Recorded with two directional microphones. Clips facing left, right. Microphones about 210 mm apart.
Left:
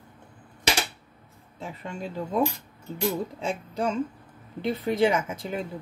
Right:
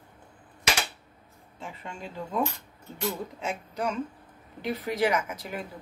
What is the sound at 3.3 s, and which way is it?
Speech, 30° left (ahead or behind).